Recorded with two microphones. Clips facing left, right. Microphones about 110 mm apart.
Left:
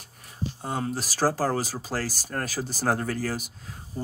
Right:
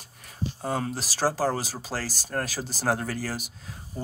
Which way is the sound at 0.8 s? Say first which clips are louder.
Left 6 dB; 40° left (ahead or behind).